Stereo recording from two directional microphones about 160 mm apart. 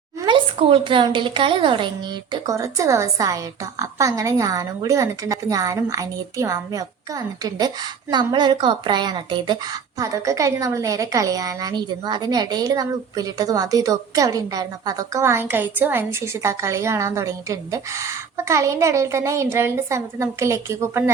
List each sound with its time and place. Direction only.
0.3 s a woman's voice: 30° right (ahead or behind)
2.3 s a woman's voice: 20° right (ahead or behind)